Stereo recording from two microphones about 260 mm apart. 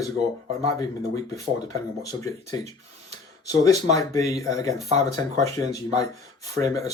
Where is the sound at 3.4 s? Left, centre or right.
Centre.